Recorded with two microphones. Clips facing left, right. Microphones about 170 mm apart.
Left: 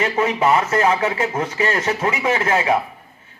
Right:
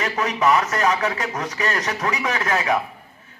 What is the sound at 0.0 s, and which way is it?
A man's voice, 25° left (ahead or behind).